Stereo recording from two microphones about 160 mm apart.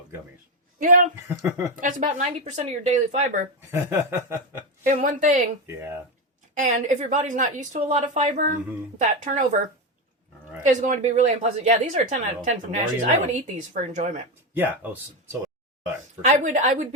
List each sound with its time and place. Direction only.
0.8 s speech: 55° right (ahead or behind)
1.4 s chuckle: 15° right (ahead or behind)
1.7 s a woman's voice: 55° right (ahead or behind)
3.7 s chuckle: 15° right (ahead or behind)
4.8 s speech: 55° right (ahead or behind)
6.5 s a woman's voice: 55° right (ahead or behind)
14.5 s chuckle: 10° right (ahead or behind)
16.2 s a woman's voice: 50° right (ahead or behind)